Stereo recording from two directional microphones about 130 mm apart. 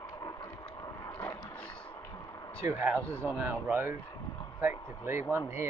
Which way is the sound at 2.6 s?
20° right (ahead or behind).